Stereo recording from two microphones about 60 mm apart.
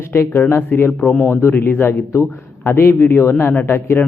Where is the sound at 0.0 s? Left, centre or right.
Left.